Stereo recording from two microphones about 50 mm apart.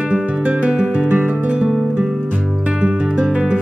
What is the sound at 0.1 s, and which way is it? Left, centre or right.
Music, right.